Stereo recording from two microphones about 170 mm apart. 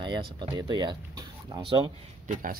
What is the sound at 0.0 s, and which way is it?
Speech, 25° right (ahead or behind).